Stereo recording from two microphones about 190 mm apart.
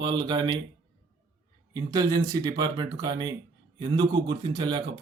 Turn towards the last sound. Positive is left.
turn(degrees=-20)  # may be behind; listen again after turning